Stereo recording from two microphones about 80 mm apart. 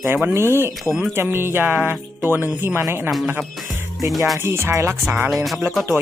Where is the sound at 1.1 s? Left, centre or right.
Right.